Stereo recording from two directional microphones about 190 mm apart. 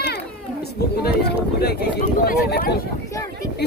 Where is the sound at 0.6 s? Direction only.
55° left (ahead or behind).